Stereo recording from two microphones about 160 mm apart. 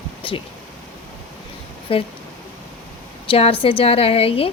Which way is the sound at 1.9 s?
35° left (ahead or behind).